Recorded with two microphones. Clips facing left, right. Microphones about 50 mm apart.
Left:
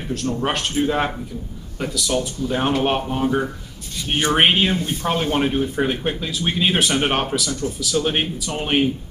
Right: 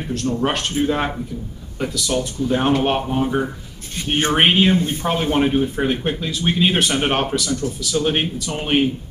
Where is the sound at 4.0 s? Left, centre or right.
Right.